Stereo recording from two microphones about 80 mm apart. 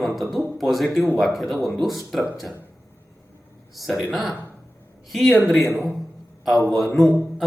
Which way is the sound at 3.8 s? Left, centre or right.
Centre.